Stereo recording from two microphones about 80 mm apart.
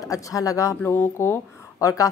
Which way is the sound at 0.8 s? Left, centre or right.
Left.